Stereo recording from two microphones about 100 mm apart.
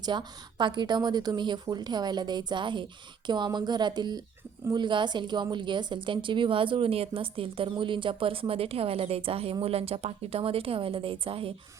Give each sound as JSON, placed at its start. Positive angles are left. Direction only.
{"t": 0.0, "sound": "a woman's voice", "side_deg": -45}